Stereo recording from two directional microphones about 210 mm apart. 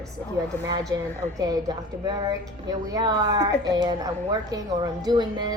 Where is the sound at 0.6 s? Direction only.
15° right (ahead or behind).